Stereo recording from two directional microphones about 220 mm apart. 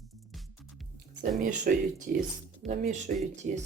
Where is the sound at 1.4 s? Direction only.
35° right (ahead or behind).